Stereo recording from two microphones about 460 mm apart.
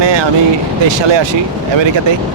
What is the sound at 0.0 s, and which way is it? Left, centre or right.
Vehicle, right.